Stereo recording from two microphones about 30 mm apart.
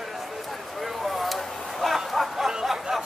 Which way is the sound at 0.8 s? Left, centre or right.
Centre.